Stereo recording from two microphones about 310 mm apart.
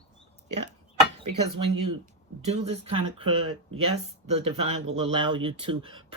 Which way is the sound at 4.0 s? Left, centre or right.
Centre.